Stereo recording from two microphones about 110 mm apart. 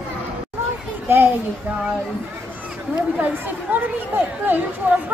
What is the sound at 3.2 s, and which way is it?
Chatter, 15° right (ahead or behind).